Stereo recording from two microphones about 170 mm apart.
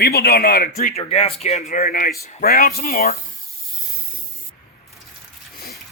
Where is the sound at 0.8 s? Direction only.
45° left (ahead or behind).